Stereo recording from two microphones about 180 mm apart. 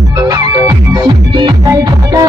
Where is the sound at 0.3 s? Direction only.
20° right (ahead or behind).